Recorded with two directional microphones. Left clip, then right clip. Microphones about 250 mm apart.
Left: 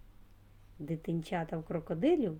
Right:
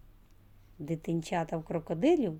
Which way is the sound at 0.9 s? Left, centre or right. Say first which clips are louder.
Right 3 dB; centre.